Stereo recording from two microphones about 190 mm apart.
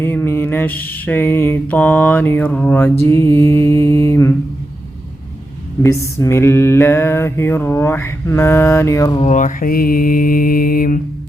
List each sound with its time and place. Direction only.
0.0 s mantra: 10° left (ahead or behind)
5.8 s mantra: 15° left (ahead or behind)
9.2 s mantra: 40° left (ahead or behind)